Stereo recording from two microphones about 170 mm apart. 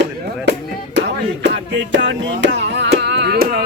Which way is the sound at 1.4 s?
90° right.